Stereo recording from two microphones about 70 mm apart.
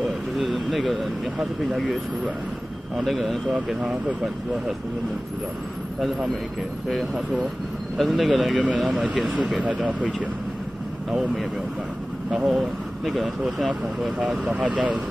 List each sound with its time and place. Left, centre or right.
0.0 s vehicle: centre
1.4 s speech: centre
3.0 s speech: centre
6.9 s speech: centre
12.4 s speech: centre
14.1 s speech: centre